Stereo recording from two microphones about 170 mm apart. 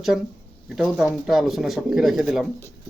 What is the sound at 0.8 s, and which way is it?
Speech, 5° right (ahead or behind).